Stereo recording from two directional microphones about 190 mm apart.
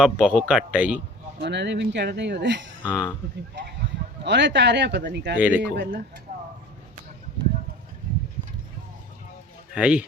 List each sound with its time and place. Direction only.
0.0 s a man's voice: 5° right (ahead or behind)
1.4 s speech: 65° right (ahead or behind)
2.8 s speech: 5° right (ahead or behind)
4.2 s speech: 65° right (ahead or behind)
5.4 s speech: 5° right (ahead or behind)
5.7 s speech: 65° right (ahead or behind)
9.7 s a man's voice: 5° right (ahead or behind)